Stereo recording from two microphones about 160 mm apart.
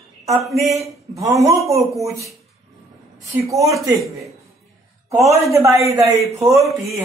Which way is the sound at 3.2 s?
20° right (ahead or behind).